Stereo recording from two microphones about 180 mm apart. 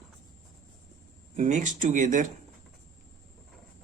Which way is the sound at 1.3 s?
40° right (ahead or behind).